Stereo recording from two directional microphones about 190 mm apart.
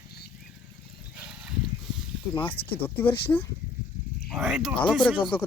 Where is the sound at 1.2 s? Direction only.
5° right (ahead or behind).